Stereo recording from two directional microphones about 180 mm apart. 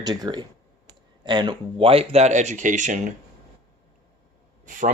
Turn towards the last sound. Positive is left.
turn(degrees=-45)  # may be behind; listen again after turning